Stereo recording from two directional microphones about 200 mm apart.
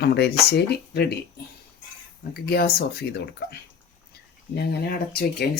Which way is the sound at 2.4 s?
50° left (ahead or behind).